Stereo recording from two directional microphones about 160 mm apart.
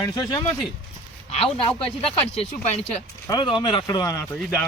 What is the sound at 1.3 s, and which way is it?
Speech, 35° left (ahead or behind).